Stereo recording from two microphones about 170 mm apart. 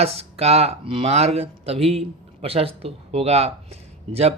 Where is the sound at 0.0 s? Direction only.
35° right (ahead or behind).